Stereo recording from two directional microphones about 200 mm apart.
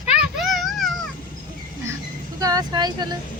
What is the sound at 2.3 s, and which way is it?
Speech, 20° right (ahead or behind).